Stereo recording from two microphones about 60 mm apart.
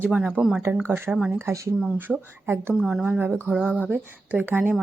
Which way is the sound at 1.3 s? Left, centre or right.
Right.